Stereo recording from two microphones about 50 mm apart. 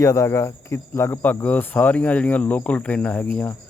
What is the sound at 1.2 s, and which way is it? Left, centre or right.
Speech, left.